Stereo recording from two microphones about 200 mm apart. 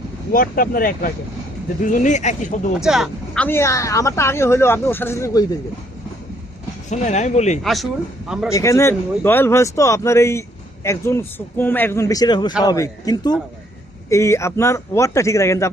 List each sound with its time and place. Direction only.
0.3 s speech: 45° left (ahead or behind)
2.8 s speech: centre (ahead or behind); by 5.5 s 15° left (ahead or behind)
6.9 s speech: 35° left (ahead or behind)
7.6 s speech: centre (ahead or behind)
8.4 s a man's voice: 15° left (ahead or behind)